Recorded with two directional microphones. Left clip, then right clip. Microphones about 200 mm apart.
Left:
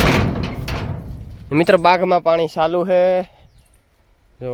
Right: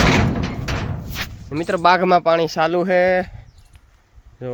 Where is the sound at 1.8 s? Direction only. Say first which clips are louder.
Even; centre (ahead or behind).